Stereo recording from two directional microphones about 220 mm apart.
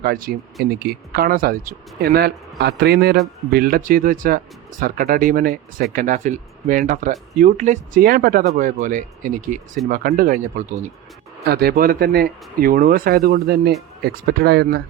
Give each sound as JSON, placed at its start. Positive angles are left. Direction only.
{"t": 0.0, "sound": "speech", "side_deg": -40}